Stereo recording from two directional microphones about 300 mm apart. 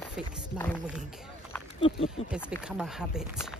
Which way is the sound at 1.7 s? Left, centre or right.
Centre.